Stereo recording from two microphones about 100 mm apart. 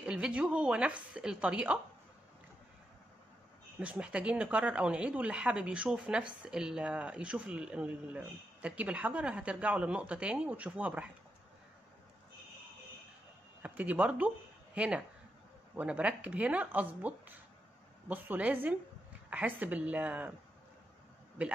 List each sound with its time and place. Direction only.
0.0 s speech: 10° right (ahead or behind)
3.8 s speech: 15° right (ahead or behind)
13.6 s speech: 15° right (ahead or behind)
21.4 s speech: 15° right (ahead or behind)